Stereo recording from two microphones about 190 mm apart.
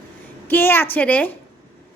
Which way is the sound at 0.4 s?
10° left (ahead or behind).